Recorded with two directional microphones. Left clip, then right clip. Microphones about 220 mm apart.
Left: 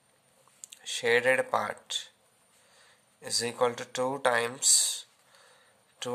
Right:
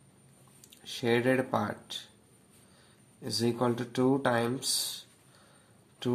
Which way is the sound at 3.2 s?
30° left (ahead or behind).